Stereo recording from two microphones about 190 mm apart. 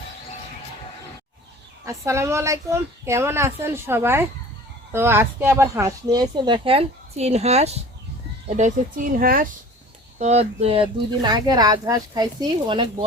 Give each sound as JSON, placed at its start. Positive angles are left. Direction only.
{"t": 1.8, "sound": "a woman's voice", "side_deg": -15}
{"t": 10.2, "sound": "speech", "side_deg": -35}